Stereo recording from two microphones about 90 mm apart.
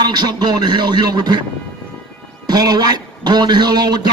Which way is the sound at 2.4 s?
45° right (ahead or behind).